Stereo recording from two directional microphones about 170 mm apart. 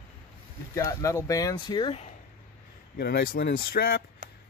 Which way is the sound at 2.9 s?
70° left (ahead or behind).